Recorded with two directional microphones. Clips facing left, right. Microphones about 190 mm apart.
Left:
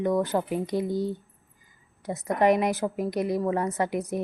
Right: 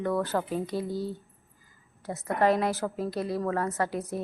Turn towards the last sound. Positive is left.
turn(degrees=15)  # may be behind; listen again after turning